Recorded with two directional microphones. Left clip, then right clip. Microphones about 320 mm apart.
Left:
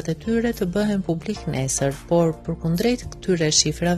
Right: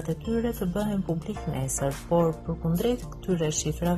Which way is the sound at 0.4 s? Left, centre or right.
Left.